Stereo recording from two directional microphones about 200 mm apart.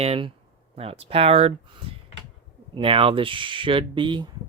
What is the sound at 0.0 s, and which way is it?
Speech, 30° right (ahead or behind).